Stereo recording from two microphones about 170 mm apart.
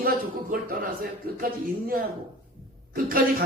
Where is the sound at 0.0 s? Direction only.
60° right (ahead or behind).